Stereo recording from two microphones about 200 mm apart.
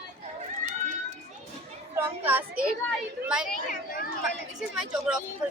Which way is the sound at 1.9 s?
10° right (ahead or behind).